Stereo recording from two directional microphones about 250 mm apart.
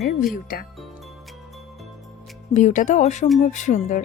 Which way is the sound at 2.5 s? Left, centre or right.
Left.